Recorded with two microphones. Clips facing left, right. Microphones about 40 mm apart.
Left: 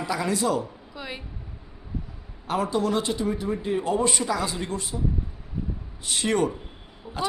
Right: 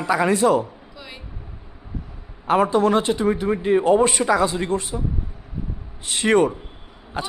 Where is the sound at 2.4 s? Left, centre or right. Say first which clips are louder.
Right 8 dB; right.